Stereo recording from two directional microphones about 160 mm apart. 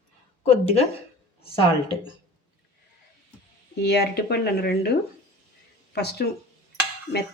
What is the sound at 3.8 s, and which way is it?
Speech, 90° left.